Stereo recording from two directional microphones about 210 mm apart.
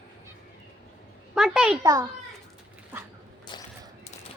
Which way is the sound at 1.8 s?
15° right (ahead or behind).